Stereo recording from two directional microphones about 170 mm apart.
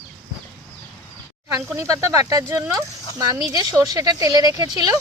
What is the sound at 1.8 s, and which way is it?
Speech, 20° right (ahead or behind).